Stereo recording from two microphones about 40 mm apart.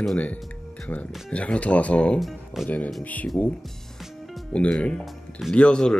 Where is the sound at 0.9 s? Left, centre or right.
Left.